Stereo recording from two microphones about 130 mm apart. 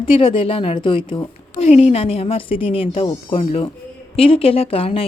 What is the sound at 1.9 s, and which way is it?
A woman's voice, 50° left (ahead or behind).